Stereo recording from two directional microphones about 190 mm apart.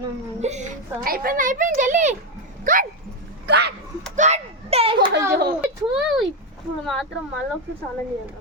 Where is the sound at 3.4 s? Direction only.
60° right (ahead or behind).